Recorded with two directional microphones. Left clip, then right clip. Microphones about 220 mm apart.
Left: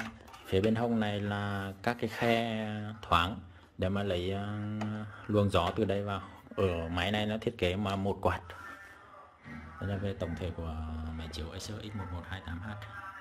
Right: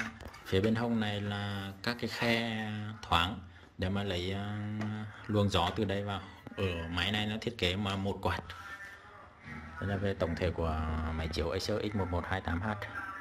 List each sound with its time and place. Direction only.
0.7 s speech: 10° left (ahead or behind)
9.8 s a man's voice: centre (ahead or behind); by 12.9 s 20° right (ahead or behind)